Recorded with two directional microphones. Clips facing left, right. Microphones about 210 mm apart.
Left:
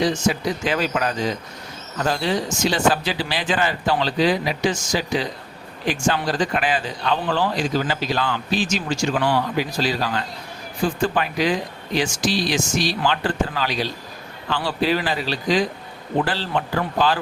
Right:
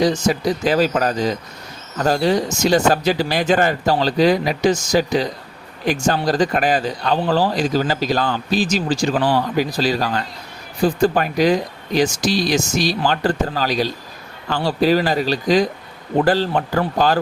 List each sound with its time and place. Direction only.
0.0 s speech: 40° right (ahead or behind)